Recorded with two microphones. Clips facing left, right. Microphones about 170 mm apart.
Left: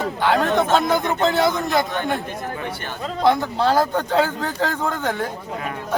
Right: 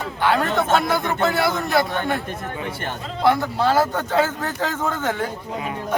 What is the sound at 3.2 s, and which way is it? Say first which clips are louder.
Speech: even; 15° left (ahead or behind).